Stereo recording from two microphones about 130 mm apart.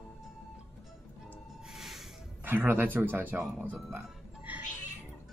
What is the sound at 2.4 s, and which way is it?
Speech, 15° right (ahead or behind).